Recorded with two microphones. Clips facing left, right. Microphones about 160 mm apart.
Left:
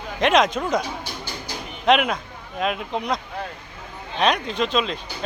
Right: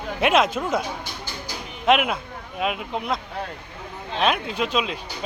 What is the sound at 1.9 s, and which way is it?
Speech, 5° right (ahead or behind).